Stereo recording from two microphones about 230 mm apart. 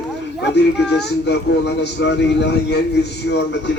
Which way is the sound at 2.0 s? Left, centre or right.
Left.